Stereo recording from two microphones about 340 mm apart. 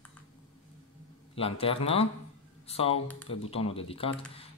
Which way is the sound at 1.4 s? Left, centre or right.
Centre.